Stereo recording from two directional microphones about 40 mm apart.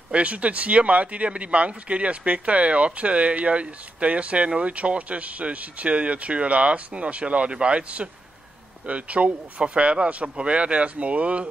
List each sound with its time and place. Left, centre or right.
0.1 s speech: right